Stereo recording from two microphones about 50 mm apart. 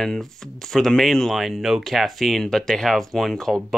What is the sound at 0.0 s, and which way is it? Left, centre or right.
Speech, centre.